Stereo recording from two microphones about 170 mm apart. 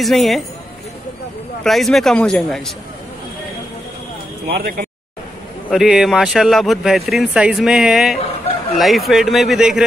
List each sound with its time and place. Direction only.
0.0 s speech: centre (ahead or behind)
1.6 s speech: centre (ahead or behind)
4.6 s speech: 55° right (ahead or behind)
5.7 s speech: 5° right (ahead or behind)